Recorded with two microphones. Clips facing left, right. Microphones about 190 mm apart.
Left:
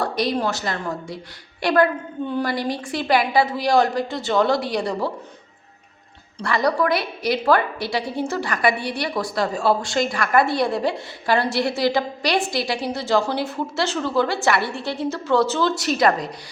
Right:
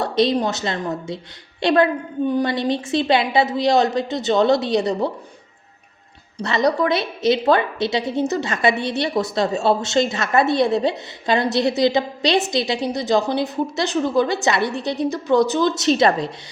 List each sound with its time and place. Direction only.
0.0 s a woman's voice: 20° right (ahead or behind)
6.4 s a woman's voice: 20° right (ahead or behind)